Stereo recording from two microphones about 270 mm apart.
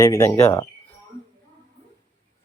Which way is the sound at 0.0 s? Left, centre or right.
Centre.